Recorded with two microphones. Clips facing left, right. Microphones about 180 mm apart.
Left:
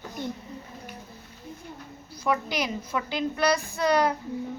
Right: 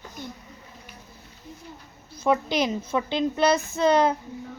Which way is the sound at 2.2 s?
25° right (ahead or behind).